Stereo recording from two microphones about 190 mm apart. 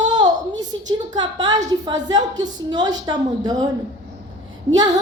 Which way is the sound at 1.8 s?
20° right (ahead or behind).